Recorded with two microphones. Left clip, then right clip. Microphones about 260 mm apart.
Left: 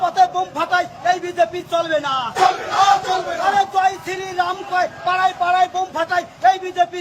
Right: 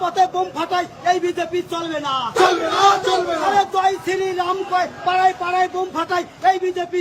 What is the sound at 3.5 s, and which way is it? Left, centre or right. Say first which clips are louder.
Speech: left 1 dB; centre.